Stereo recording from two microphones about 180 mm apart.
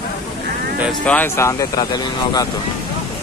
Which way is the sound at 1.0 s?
10° left (ahead or behind).